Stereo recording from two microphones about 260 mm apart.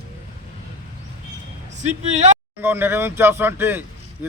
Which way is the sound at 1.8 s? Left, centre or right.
Right.